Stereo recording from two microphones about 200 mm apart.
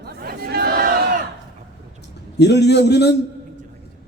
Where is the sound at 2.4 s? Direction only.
55° left (ahead or behind).